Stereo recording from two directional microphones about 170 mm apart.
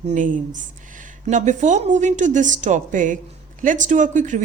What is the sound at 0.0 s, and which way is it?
Speech, 45° right (ahead or behind).